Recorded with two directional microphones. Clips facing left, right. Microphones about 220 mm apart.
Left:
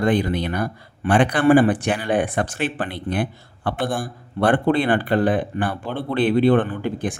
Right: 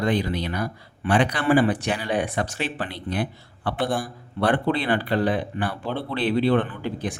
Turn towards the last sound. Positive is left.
turn(degrees=50)  # may be behind; listen again after turning